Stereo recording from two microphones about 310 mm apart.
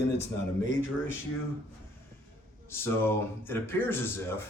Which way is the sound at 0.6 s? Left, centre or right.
Left.